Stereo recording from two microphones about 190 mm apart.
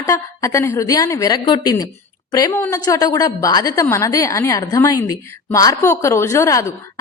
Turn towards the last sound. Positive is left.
turn(degrees=15)  # may be behind; listen again after turning